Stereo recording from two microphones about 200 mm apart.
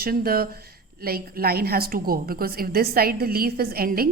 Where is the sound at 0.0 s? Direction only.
50° right (ahead or behind).